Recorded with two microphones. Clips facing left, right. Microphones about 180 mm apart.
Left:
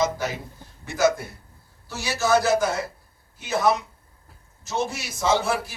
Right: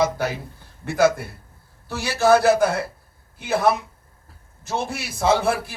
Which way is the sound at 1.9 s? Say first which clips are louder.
Right 5 dB; 55° right (ahead or behind).